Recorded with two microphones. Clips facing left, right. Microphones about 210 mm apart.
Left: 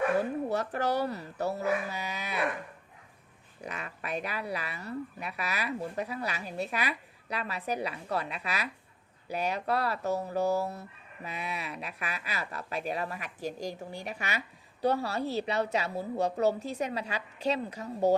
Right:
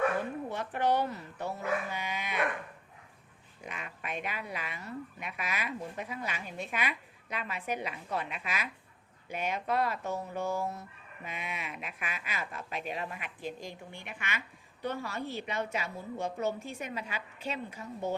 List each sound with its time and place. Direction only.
0.2 s speech: 40° left (ahead or behind)
3.6 s speech: 40° left (ahead or behind)